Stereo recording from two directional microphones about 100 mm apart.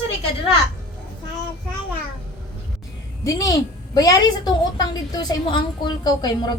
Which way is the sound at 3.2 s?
35° left (ahead or behind).